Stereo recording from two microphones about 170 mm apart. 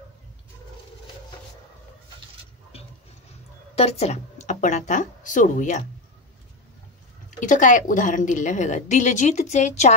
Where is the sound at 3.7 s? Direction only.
35° left (ahead or behind).